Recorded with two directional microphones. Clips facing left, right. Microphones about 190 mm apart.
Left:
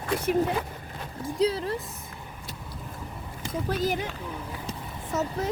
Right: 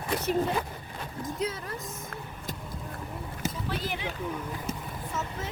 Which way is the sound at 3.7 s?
40° left (ahead or behind).